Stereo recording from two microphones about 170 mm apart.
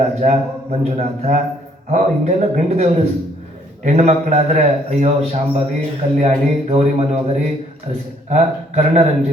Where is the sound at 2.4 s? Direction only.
40° right (ahead or behind).